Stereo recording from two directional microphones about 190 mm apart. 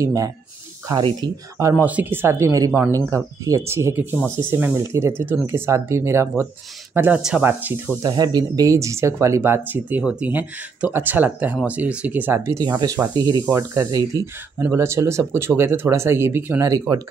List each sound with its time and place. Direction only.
0.0 s speech: 20° right (ahead or behind)